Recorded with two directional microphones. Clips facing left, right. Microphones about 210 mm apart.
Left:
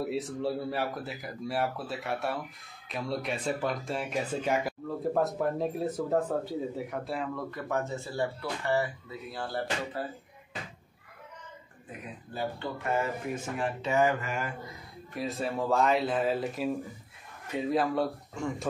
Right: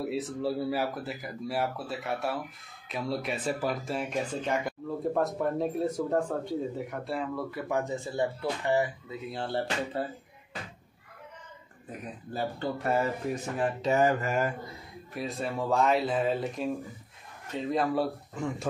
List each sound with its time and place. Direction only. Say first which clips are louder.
0.0 s speech: even; centre (ahead or behind); by 10.0 s 25° right (ahead or behind)
12.4 s speech: right 2 dB; 40° right (ahead or behind)
15.1 s speech: left 1 dB; centre (ahead or behind)